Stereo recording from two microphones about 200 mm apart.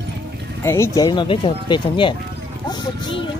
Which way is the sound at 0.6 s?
15° left (ahead or behind).